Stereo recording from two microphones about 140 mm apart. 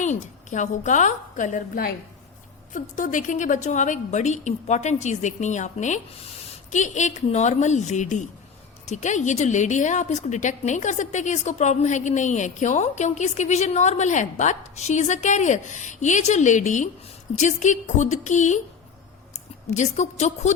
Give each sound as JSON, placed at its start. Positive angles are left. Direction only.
{"t": 0.0, "sound": "a woman's voice", "side_deg": 60}
{"t": 19.7, "sound": "a woman's voice", "side_deg": 55}